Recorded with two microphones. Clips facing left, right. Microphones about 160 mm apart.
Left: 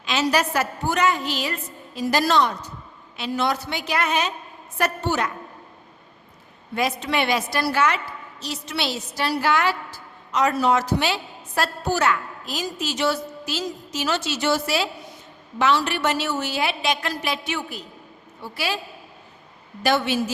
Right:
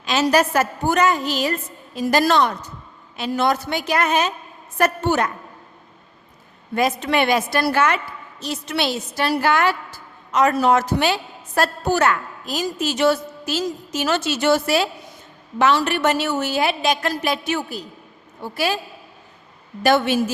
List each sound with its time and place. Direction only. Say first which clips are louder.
0.0 s a woman's voice: right 4 dB; 45° right (ahead or behind)
6.7 s a woman's voice: right 4 dB; 50° right (ahead or behind)
19.8 s a woman's voice: right 4 dB; 50° right (ahead or behind)